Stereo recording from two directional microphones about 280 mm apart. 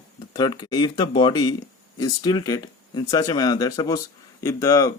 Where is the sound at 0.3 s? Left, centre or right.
Centre.